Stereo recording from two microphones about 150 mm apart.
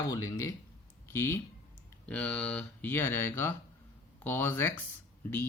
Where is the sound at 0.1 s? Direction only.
25° left (ahead or behind).